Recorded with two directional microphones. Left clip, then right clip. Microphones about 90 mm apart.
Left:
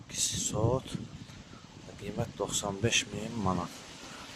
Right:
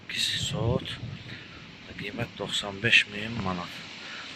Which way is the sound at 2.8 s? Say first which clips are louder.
Right 9 dB; 35° left (ahead or behind).